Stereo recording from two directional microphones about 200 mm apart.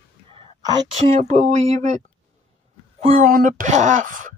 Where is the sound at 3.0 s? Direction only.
30° right (ahead or behind).